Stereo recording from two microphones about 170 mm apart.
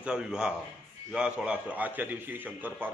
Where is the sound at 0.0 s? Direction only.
5° right (ahead or behind).